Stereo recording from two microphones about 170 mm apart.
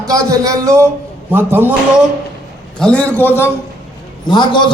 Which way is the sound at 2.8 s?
5° left (ahead or behind).